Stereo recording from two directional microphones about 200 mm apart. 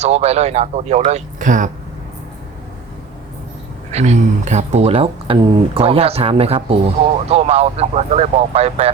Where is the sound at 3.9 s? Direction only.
35° right (ahead or behind).